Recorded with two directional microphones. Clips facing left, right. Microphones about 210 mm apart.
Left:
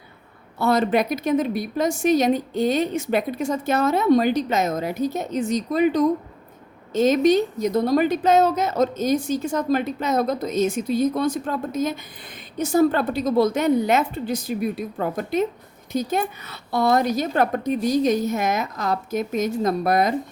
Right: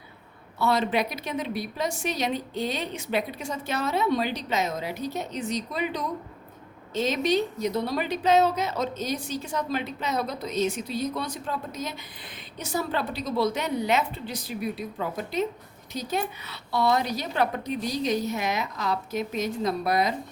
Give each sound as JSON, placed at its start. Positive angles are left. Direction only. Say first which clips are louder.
{"t": 0.6, "sound": "a woman's voice", "louder": "left 5 dB", "side_deg": 45}